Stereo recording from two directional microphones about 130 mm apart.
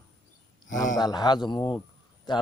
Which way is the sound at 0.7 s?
90° left.